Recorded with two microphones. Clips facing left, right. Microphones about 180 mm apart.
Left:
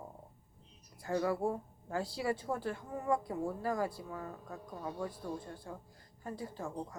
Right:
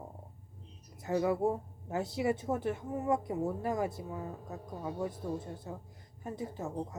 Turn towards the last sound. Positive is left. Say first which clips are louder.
# right 3 dB
turn(degrees=-25)  # may be behind; listen again after turning